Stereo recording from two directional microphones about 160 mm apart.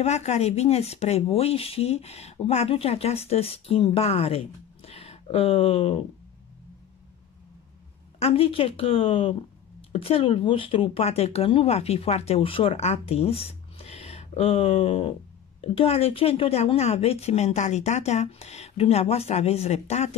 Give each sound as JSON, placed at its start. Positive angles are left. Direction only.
{"t": 0.0, "sound": "speech", "side_deg": 45}
{"t": 8.2, "sound": "speech", "side_deg": 35}